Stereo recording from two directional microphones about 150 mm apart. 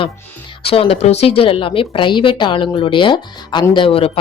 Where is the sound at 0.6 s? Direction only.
40° left (ahead or behind).